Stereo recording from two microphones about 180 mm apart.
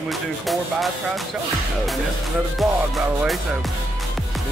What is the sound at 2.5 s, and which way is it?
Music, centre (ahead or behind).